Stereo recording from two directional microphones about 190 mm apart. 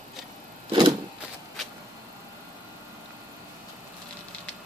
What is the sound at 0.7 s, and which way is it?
Vehicle, 25° right (ahead or behind).